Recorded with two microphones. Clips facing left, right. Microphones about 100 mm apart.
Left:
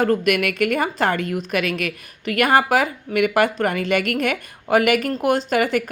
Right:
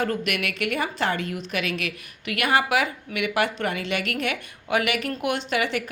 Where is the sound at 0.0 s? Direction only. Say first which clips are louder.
Left 8 dB; 45° left (ahead or behind).